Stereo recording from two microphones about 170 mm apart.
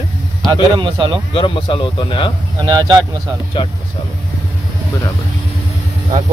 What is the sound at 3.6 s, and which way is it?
Speech, 30° left (ahead or behind).